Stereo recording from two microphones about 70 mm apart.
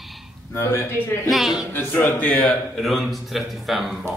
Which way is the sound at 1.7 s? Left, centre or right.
Left.